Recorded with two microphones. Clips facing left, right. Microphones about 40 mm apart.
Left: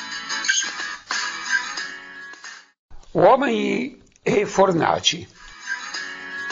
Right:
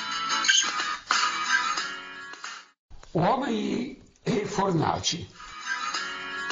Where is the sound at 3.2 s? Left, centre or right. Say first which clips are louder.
Left 10 dB; left.